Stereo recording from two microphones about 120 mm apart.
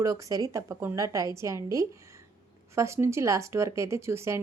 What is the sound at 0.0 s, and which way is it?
Speech, 30° right (ahead or behind).